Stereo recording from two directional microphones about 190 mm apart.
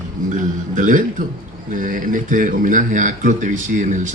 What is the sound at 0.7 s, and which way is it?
Speech, 45° right (ahead or behind).